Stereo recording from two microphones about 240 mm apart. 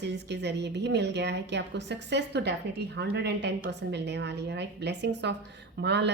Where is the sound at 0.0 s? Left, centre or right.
Right.